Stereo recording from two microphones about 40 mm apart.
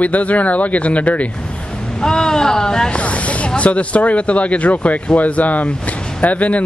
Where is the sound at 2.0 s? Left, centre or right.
Centre.